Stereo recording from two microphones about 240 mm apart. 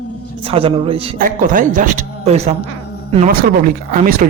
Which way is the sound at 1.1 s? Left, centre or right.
Right.